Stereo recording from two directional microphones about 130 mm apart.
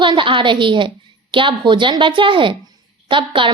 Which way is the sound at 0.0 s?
40° right (ahead or behind).